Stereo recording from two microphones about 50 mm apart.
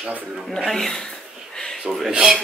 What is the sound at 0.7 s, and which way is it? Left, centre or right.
Speech, centre.